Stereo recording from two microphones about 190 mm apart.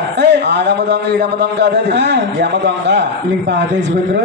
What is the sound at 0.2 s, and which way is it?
A man's voice, 65° right (ahead or behind).